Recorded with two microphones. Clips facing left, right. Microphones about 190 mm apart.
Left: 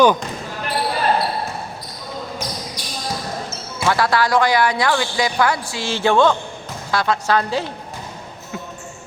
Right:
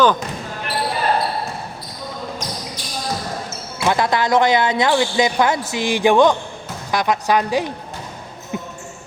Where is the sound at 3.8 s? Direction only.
20° right (ahead or behind).